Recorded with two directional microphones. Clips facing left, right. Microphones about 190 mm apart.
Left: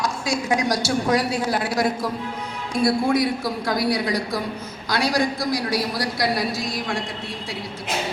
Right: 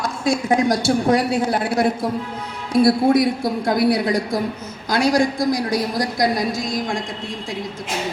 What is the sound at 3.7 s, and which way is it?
A woman's voice, 55° right (ahead or behind).